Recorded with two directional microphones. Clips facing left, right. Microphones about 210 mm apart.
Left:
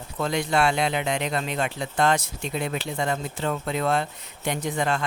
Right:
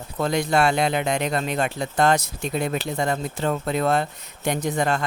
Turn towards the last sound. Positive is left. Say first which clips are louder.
# right 3 dB
turn(degrees=-40)  # may be behind; listen again after turning